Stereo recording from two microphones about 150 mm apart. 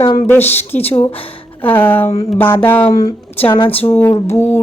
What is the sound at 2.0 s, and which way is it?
Speech, 45° left (ahead or behind).